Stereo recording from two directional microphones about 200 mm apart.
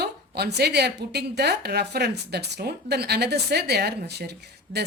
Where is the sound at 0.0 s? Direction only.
55° right (ahead or behind).